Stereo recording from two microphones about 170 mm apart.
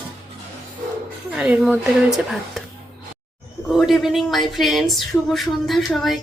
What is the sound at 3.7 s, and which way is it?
Speech, centre (ahead or behind).